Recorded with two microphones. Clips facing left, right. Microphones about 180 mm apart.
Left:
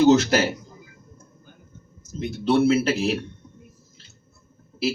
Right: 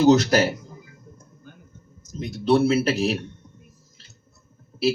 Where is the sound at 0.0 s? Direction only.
35° right (ahead or behind).